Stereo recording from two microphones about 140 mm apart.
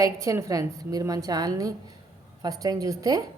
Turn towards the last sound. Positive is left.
turn(degrees=-25)  # may be behind; listen again after turning